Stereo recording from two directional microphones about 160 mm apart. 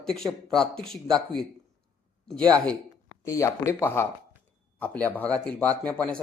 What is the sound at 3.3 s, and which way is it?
Speech, 20° left (ahead or behind).